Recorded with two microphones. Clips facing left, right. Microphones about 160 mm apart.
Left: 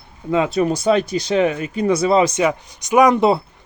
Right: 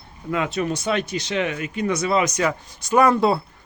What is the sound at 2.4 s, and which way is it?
Speech, 20° left (ahead or behind).